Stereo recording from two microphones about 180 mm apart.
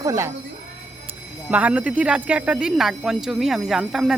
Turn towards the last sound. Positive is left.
turn(degrees=-5)  # may be behind; listen again after turning